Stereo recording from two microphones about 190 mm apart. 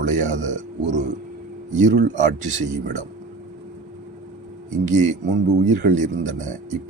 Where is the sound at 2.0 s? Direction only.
40° right (ahead or behind).